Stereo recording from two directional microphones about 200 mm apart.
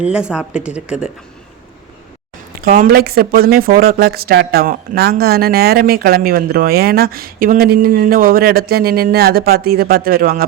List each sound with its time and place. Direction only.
0.0 s speech: 5° right (ahead or behind)
2.6 s speech: 45° right (ahead or behind)